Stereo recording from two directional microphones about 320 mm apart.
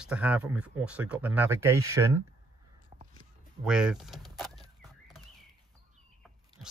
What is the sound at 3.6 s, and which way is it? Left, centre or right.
Speech, centre.